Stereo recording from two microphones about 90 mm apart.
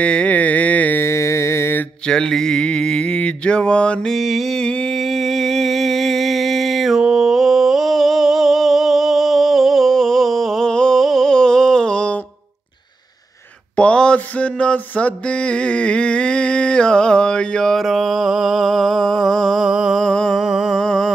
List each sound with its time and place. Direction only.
0.0 s music: 15° left (ahead or behind)
1.0 s mantra: 30° left (ahead or behind)
2.0 s mantra: 5° left (ahead or behind)
13.7 s mantra: 10° left (ahead or behind); by 20.0 s 5° right (ahead or behind)
20.0 s a sound: 5° left (ahead or behind)
20.4 s a sound: 5° right (ahead or behind)